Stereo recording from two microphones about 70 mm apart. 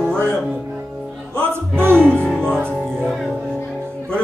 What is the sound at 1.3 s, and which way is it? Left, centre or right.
Music, right.